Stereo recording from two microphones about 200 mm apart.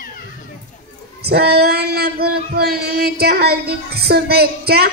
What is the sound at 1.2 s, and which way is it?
Female singing, 55° right (ahead or behind).